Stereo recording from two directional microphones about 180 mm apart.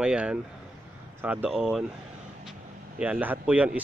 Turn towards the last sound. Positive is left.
turn(degrees=-5)  # may be behind; listen again after turning